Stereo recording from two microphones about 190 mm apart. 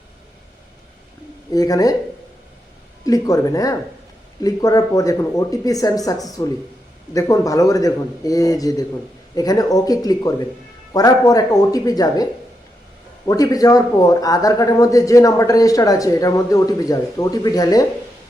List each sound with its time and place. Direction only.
1.5 s speech: 20° left (ahead or behind)
3.1 s a man's voice: 20° left (ahead or behind)